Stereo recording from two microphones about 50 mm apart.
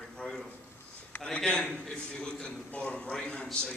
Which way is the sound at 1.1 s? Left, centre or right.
Left.